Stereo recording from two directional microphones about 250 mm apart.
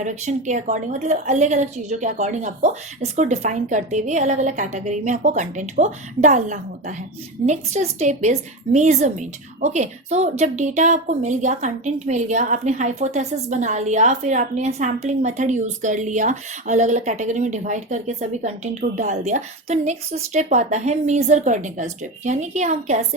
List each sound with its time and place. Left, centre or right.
0.0 s a woman's voice: right